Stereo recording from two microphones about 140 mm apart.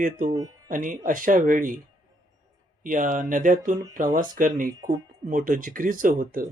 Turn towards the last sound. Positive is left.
turn(degrees=-80)